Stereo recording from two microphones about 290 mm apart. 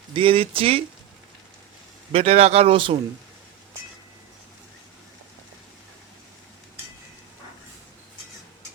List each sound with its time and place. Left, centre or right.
0.1 s a man's voice: centre
2.1 s a man's voice: right